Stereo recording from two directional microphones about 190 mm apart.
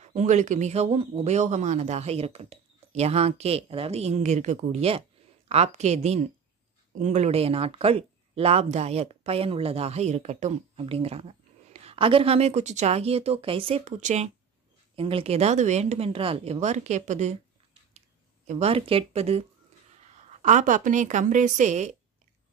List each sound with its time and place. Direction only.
0.0 s speech: 35° right (ahead or behind)
18.5 s speech: 30° right (ahead or behind)
20.4 s speech: 40° right (ahead or behind)